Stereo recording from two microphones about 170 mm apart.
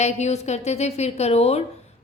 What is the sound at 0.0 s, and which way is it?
A woman's voice, 40° left (ahead or behind).